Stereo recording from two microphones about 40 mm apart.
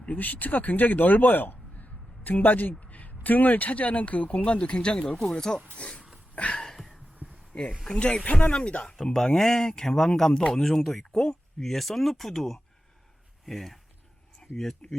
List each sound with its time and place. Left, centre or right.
0.0 s a man's voice: left
1.7 s speech: left; by 5.5 s centre
5.7 s speech: left
6.3 s a sound: left
7.9 s speech: left
9.1 s speech: centre